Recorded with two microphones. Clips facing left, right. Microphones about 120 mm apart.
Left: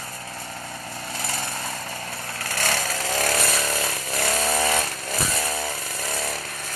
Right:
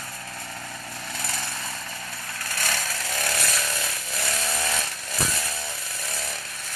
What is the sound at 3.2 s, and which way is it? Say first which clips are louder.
Chainsaw: left 4 dB; 40° left (ahead or behind).